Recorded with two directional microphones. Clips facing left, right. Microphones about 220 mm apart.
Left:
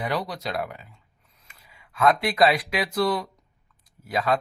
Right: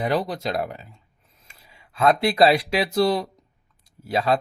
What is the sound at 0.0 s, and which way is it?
Speech, 35° right (ahead or behind).